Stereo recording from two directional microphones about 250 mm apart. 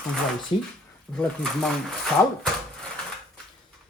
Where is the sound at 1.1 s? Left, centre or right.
Centre.